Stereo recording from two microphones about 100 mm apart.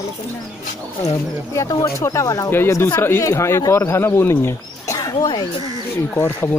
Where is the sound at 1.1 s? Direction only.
30° left (ahead or behind).